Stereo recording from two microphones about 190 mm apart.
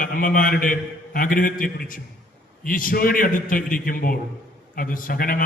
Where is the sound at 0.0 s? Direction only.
45° left (ahead or behind).